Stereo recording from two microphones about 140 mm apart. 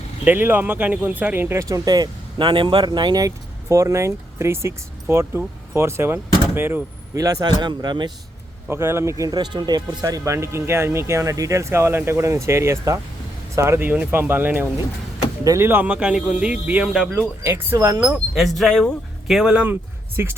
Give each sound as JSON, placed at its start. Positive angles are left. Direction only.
{"t": 0.3, "sound": "speech", "side_deg": -15}
{"t": 8.7, "sound": "speech", "side_deg": -20}
{"t": 17.4, "sound": "speech", "side_deg": -20}
{"t": 18.0, "sound": "speech", "side_deg": -5}
{"t": 20.2, "sound": "speech", "side_deg": -20}